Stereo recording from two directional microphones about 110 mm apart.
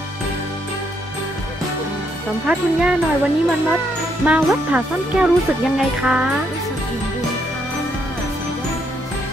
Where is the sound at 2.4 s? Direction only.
10° right (ahead or behind).